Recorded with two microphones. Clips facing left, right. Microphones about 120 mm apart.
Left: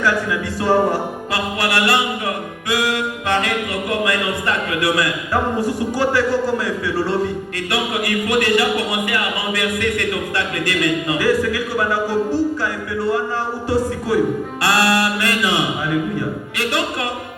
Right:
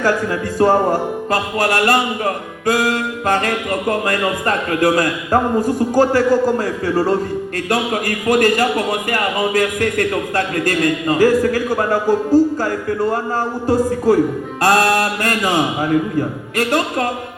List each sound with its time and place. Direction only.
0.0 s a man's voice: 45° right (ahead or behind)